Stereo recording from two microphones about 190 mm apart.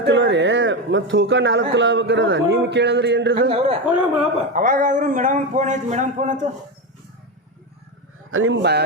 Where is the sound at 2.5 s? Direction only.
65° right (ahead or behind).